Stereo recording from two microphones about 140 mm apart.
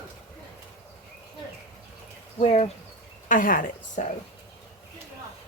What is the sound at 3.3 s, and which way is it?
Speech, 75° left (ahead or behind).